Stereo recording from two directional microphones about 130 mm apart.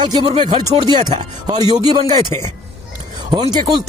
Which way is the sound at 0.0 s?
40° right (ahead or behind).